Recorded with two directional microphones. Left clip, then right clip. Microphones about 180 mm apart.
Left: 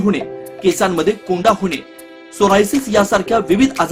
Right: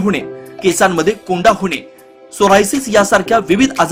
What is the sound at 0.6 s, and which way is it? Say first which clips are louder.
Speech: right 3 dB; 15° right (ahead or behind).